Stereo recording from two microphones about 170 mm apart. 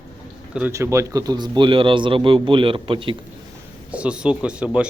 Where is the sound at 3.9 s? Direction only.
5° right (ahead or behind).